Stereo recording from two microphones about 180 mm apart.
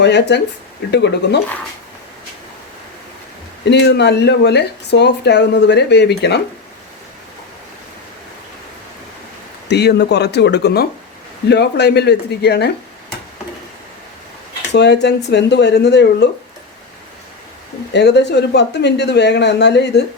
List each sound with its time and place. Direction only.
0.0 s speech: 70° left (ahead or behind)
3.7 s speech: 70° left (ahead or behind)
9.6 s speech: 70° left (ahead or behind)
14.7 s speech: 70° left (ahead or behind)
17.9 s speech: 70° left (ahead or behind)